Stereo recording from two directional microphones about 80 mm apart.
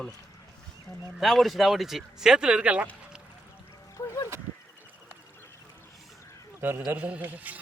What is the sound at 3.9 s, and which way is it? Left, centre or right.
Honk, left.